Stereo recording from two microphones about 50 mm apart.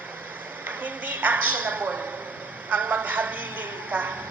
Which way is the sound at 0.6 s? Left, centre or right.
Right.